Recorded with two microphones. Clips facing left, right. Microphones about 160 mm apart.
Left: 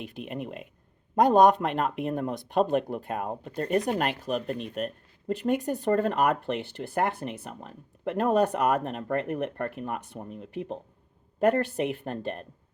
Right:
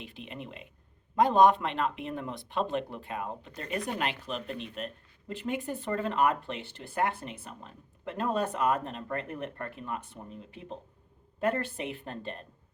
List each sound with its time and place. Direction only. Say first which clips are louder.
0.0 s speech: left 7 dB; 50° left (ahead or behind)